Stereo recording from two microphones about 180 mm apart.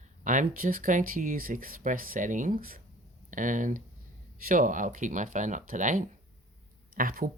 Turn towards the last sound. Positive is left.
turn(degrees=-50)  # may be behind; listen again after turning